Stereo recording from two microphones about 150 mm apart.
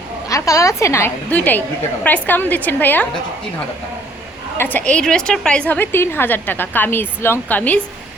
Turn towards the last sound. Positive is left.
turn(degrees=10)  # may be behind; listen again after turning